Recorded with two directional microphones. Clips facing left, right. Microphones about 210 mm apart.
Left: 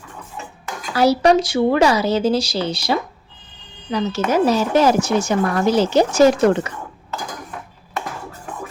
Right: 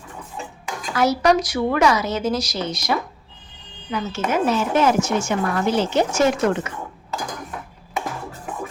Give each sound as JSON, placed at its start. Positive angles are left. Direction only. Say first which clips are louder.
{"t": 0.9, "sound": "speech", "louder": "left 3 dB", "side_deg": 30}
{"t": 4.1, "sound": "speech", "louder": "left 3 dB", "side_deg": 35}